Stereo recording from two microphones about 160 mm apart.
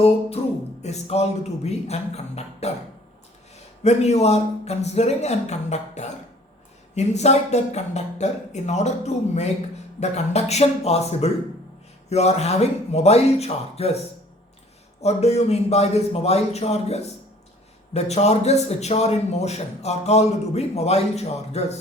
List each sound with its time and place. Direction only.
0.4 s a man's voice: 40° left (ahead or behind)
3.8 s a man's voice: 45° left (ahead or behind)
15.0 s a man's voice: 40° left (ahead or behind)